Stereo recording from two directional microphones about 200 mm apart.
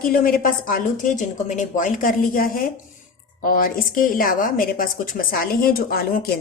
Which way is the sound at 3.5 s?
45° left (ahead or behind).